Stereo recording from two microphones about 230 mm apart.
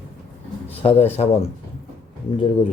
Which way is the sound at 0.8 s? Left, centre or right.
Left.